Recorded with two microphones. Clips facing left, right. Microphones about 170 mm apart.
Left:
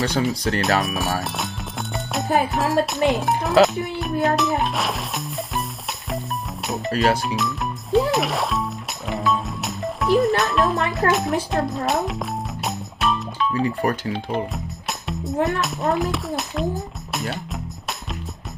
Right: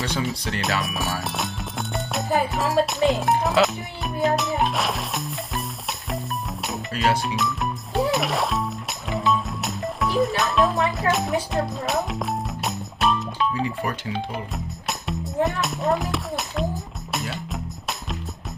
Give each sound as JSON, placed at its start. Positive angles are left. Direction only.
{"t": 0.1, "sound": "speech", "side_deg": 40}
{"t": 0.6, "sound": "speech", "side_deg": 0}
{"t": 3.6, "sound": "music", "side_deg": 0}
{"t": 7.2, "sound": "speech", "side_deg": 0}
{"t": 9.3, "sound": "music", "side_deg": 0}
{"t": 13.8, "sound": "speech", "side_deg": 45}
{"t": 14.5, "sound": "music", "side_deg": 0}